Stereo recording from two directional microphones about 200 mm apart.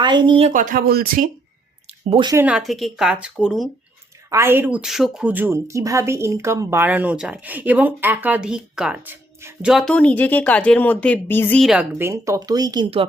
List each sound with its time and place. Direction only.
0.0 s speech: 25° right (ahead or behind)
0.5 s speech: 45° right (ahead or behind)
1.9 s a sound: 30° right (ahead or behind)
2.3 s a woman's voice: 5° right (ahead or behind)
4.3 s speech: 10° right (ahead or behind)